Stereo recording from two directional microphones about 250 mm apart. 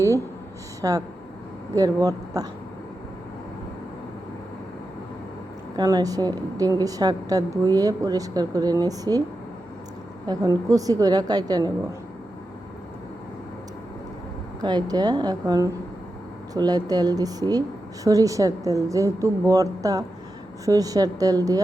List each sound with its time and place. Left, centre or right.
0.8 s a woman's voice: centre
5.7 s a woman's voice: centre
10.2 s a woman's voice: centre
14.6 s a woman's voice: centre